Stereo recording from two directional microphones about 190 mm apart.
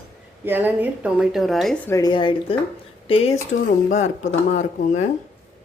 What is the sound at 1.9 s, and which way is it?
Speech, 20° left (ahead or behind).